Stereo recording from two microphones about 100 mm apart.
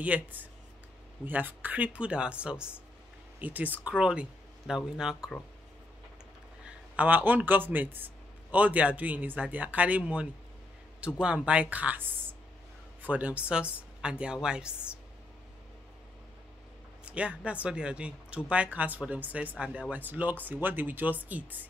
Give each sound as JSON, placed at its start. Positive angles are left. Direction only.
{"t": 0.0, "sound": "speech", "side_deg": -15}
{"t": 6.6, "sound": "speech", "side_deg": -15}
{"t": 13.0, "sound": "speech", "side_deg": -15}
{"t": 17.0, "sound": "speech", "side_deg": -15}